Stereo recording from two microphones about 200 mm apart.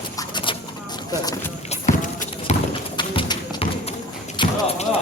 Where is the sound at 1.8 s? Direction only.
40° left (ahead or behind).